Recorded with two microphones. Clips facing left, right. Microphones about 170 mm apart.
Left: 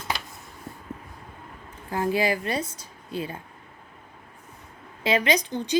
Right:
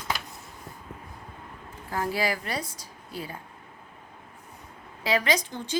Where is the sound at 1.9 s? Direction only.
20° left (ahead or behind).